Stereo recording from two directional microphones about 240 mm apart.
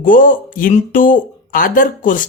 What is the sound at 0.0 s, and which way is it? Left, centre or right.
Speech, left.